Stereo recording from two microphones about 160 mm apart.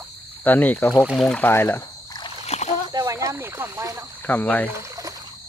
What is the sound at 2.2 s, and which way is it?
Splash, 40° left (ahead or behind).